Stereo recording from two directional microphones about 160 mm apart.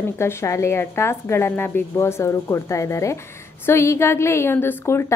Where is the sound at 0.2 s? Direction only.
15° left (ahead or behind).